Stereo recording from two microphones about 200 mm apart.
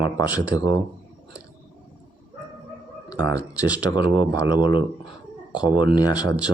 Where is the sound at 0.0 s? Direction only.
20° left (ahead or behind).